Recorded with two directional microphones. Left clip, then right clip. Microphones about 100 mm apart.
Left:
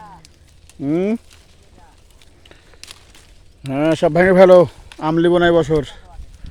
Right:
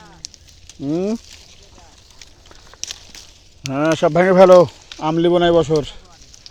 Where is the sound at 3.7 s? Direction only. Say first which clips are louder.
Even; 30° left (ahead or behind).